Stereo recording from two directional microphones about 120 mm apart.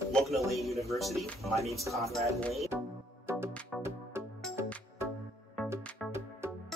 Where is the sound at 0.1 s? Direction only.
Centre (ahead or behind).